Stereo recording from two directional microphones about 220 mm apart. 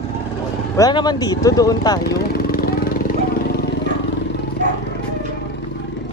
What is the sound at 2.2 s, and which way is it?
Vehicle, 45° left (ahead or behind).